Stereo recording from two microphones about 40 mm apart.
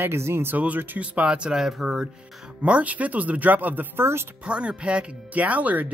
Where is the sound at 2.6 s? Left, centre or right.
Right.